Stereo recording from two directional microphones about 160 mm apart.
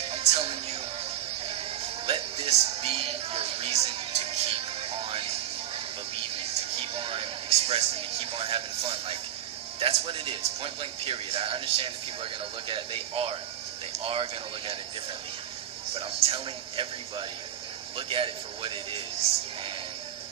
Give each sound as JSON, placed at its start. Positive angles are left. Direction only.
{"t": 0.0, "sound": "music", "side_deg": -40}
{"t": 6.2, "sound": "speech", "side_deg": -40}
{"t": 16.0, "sound": "speech", "side_deg": -40}